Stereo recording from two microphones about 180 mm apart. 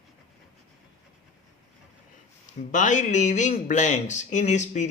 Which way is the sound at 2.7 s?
45° left (ahead or behind).